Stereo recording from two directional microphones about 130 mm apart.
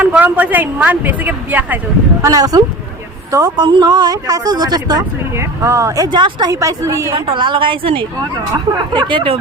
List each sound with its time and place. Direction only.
0.0 s speech: 10° right (ahead or behind)
2.2 s a woman's voice: 30° right (ahead or behind)
6.1 s a woman's voice: 35° right (ahead or behind)
7.1 s speech: 40° right (ahead or behind)